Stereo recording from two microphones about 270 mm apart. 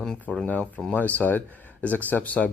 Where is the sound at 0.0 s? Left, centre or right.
Centre.